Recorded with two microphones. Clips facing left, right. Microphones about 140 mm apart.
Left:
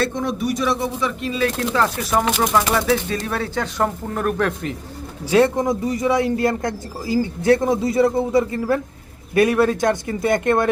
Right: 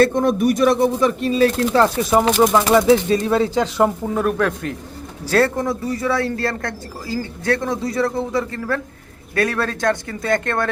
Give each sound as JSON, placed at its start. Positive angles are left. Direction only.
{"t": 0.0, "sound": "speech", "side_deg": -50}
{"t": 2.0, "sound": "speech", "side_deg": -20}
{"t": 5.3, "sound": "a man's voice", "side_deg": 15}